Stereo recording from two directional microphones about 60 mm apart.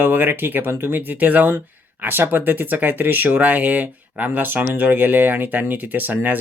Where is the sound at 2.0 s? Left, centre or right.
Right.